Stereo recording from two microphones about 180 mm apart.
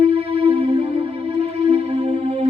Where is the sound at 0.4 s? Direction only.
30° right (ahead or behind).